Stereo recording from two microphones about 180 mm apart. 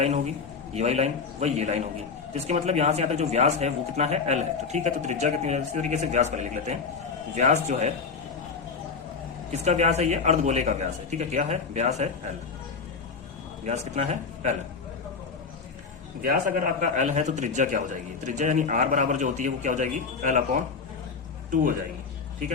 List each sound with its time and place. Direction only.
0.7 s speech: 35° right (ahead or behind)
9.5 s speech: 40° right (ahead or behind)
13.7 s speech: 40° right (ahead or behind)
16.2 s a man's voice: 45° right (ahead or behind)